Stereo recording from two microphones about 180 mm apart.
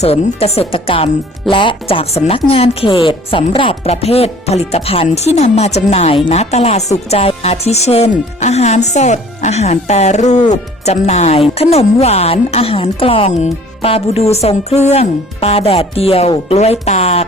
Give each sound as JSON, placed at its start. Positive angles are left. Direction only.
{"t": 0.0, "sound": "speech", "side_deg": 35}